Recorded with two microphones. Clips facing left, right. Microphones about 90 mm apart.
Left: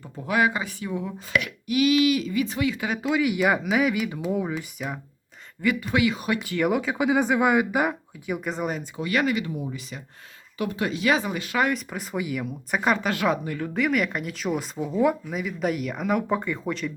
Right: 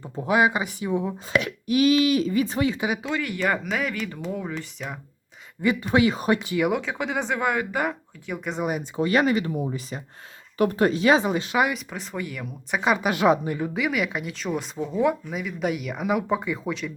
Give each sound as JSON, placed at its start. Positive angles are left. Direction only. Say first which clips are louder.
{"t": 0.0, "sound": "speech", "louder": "right 2 dB", "side_deg": -25}
{"t": 3.0, "sound": "speech", "louder": "left 4 dB", "side_deg": 5}
{"t": 5.8, "sound": "speech", "louder": "right 3 dB", "side_deg": -35}
{"t": 6.6, "sound": "speech", "louder": "left 1 dB", "side_deg": 0}
{"t": 9.0, "sound": "speech", "louder": "right 4 dB", "side_deg": -30}
{"t": 11.6, "sound": "speech", "louder": "even", "side_deg": 0}
{"t": 13.1, "sound": "speech", "louder": "right 4 dB", "side_deg": -20}
{"t": 13.7, "sound": "speech", "louder": "left 5 dB", "side_deg": 0}